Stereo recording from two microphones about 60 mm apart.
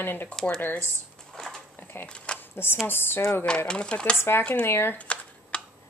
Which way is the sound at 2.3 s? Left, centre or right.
Left.